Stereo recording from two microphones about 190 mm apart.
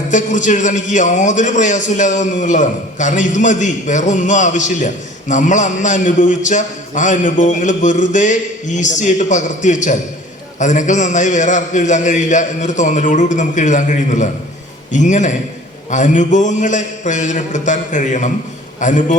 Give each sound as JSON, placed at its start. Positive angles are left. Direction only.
{"t": 0.1, "sound": "a man's voice", "side_deg": 40}